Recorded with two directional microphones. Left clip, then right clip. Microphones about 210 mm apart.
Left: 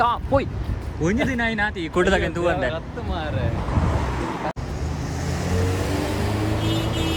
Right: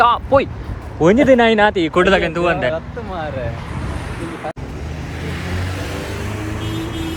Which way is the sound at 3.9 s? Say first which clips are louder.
Left 2 dB; 45° left (ahead or behind).